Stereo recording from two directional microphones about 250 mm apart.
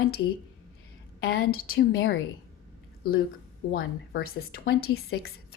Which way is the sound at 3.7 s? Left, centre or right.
Left.